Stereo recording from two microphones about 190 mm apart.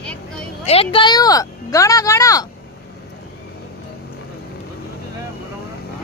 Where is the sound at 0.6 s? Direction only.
30° left (ahead or behind).